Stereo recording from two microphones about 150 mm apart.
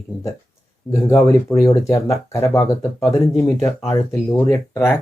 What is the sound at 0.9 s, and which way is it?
Speech, 20° left (ahead or behind).